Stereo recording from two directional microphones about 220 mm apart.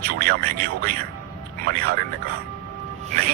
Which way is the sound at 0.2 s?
45° right (ahead or behind).